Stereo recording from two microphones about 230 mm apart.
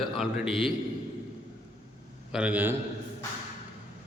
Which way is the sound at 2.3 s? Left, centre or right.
Centre.